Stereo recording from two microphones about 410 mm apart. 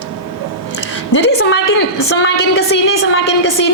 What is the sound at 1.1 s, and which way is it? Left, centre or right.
A woman's voice, left.